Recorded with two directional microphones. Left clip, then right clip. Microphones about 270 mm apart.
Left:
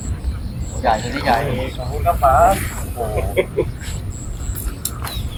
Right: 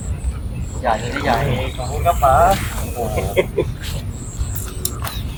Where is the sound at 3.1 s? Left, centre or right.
Right.